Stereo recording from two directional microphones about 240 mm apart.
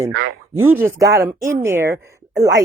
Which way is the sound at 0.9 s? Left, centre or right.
Centre.